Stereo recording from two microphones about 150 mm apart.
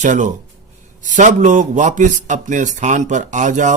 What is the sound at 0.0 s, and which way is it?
Speech, 55° right (ahead or behind).